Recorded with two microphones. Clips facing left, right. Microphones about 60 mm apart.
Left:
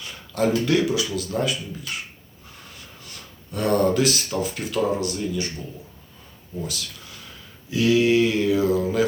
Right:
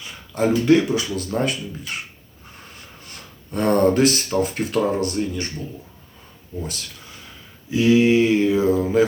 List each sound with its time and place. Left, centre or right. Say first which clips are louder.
0.0 s speech: right 1 dB; right
3.1 s a sound: right 3 dB; right
4.4 s speech: right 4 dB; right
7.7 s mantra: right 3 dB; right